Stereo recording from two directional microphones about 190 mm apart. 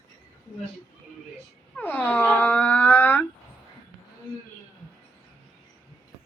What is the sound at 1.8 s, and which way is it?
Speech, 10° left (ahead or behind).